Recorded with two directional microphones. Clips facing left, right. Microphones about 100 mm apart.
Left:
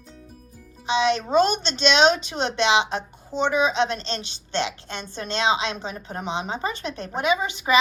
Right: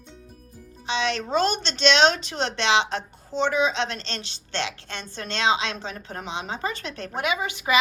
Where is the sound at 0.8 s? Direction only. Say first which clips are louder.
Left 5 dB; 15° left (ahead or behind).